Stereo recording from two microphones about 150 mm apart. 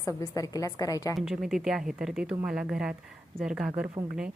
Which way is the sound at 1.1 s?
5° right (ahead or behind).